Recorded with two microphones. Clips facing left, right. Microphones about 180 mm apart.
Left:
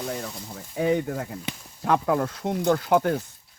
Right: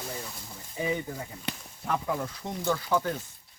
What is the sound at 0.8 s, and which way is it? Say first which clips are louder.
Speech: left 7 dB; 70° left (ahead or behind).